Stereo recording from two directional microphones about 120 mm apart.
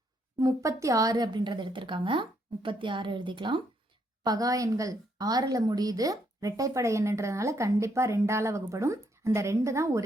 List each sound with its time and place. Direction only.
0.3 s a woman's voice: 30° right (ahead or behind)
4.2 s a woman's voice: 30° right (ahead or behind)